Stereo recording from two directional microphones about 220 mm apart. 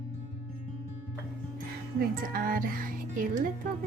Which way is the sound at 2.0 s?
40° right (ahead or behind).